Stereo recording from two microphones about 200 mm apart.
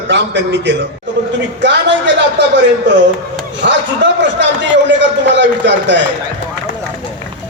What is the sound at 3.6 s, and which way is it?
A man's voice, 60° right (ahead or behind).